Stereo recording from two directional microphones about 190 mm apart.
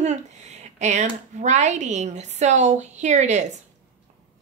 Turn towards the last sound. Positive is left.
turn(degrees=-40)  # may be behind; listen again after turning